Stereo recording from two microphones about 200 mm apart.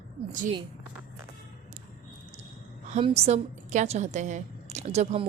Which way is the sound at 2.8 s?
35° right (ahead or behind).